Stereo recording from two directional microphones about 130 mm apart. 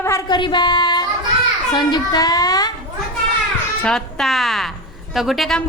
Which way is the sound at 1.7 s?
35° left (ahead or behind).